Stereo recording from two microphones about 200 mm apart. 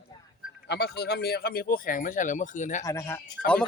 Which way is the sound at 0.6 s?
55° left (ahead or behind).